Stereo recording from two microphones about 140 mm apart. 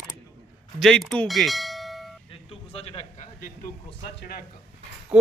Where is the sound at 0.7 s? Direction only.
Centre (ahead or behind).